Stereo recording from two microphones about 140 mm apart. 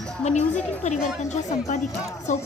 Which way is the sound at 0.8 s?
55° left (ahead or behind).